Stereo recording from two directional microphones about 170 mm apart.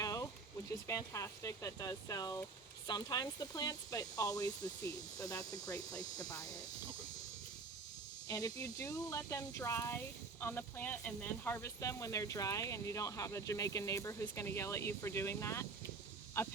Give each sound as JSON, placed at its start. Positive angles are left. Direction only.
{"t": 0.0, "sound": "a sound", "side_deg": 20}
{"t": 0.9, "sound": "speech", "side_deg": 15}
{"t": 8.3, "sound": "speech", "side_deg": 20}